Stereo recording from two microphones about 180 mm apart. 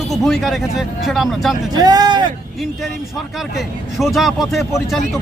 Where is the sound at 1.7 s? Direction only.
20° right (ahead or behind).